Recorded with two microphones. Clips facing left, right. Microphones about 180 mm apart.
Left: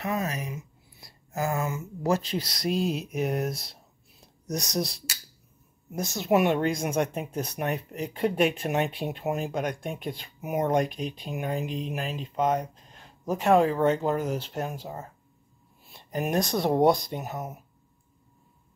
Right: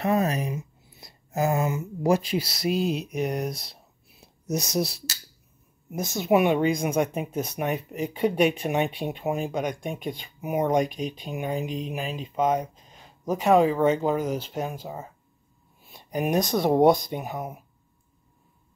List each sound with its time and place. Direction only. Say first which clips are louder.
0.0 s speech: right 6 dB; 35° right (ahead or behind)
1.0 s speech: right 4 dB; 20° right (ahead or behind); by 15.0 s centre (ahead or behind)
15.9 s a sound: right 3 dB; centre (ahead or behind)
16.4 s speech: right 3 dB; centre (ahead or behind)